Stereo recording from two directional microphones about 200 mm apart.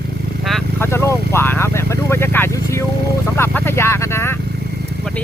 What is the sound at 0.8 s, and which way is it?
Vehicle, 15° left (ahead or behind).